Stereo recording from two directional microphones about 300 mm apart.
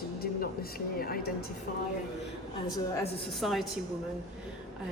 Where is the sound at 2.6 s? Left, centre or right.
Centre.